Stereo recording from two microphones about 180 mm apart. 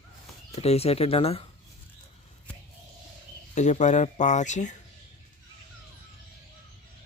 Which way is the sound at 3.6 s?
40° left (ahead or behind).